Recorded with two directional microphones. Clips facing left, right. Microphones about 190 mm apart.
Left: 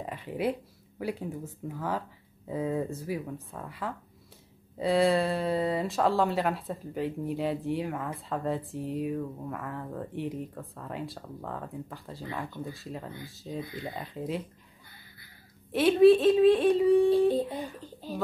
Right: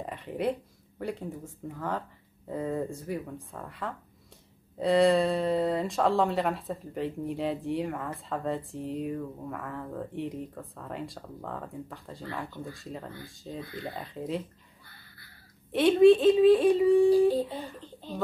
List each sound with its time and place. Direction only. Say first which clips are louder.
0.0 s speech: even; centre (ahead or behind)
13.6 s speech: left 1 dB; 15° left (ahead or behind)
13.9 s speech: even; centre (ahead or behind)
15.7 s speech: even; centre (ahead or behind)